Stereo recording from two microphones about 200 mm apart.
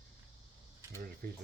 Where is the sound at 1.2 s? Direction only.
50° right (ahead or behind).